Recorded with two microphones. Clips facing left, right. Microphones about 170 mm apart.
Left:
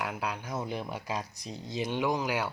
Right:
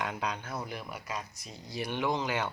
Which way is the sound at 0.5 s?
25° left (ahead or behind).